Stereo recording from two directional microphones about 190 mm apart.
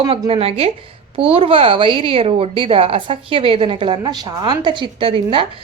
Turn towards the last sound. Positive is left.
turn(degrees=-25)  # may be behind; listen again after turning